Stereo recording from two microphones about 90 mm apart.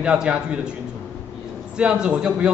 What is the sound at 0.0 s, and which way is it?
Speech, 10° right (ahead or behind).